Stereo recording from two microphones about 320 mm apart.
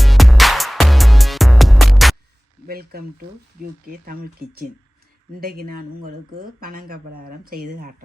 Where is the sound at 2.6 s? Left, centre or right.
Right.